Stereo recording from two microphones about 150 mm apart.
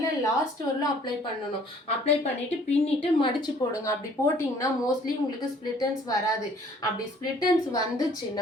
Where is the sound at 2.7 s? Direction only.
40° left (ahead or behind).